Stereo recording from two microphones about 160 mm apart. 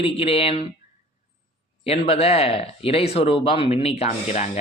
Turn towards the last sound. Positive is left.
turn(degrees=45)  # may be behind; listen again after turning